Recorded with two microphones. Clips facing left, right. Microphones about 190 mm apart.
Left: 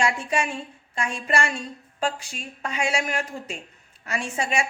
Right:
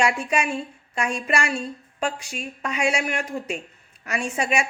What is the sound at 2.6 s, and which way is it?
A woman's voice, 30° left (ahead or behind).